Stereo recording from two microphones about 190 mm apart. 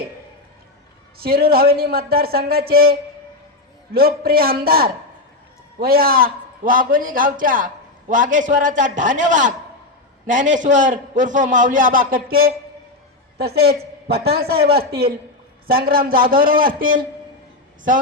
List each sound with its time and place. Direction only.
1.2 s a man's voice: 55° right (ahead or behind)
3.9 s a man's voice: 50° right (ahead or behind)